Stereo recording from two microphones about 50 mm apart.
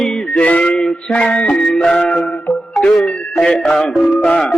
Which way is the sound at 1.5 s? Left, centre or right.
Centre.